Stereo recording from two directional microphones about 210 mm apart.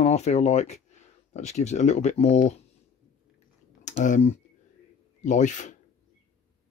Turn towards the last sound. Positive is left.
turn(degrees=35)  # may be behind; listen again after turning